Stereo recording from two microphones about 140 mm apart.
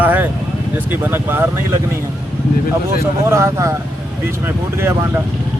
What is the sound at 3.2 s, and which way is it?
Speech, 20° right (ahead or behind).